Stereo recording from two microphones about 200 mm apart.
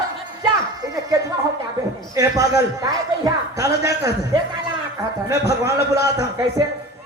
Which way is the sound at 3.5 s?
55° left (ahead or behind).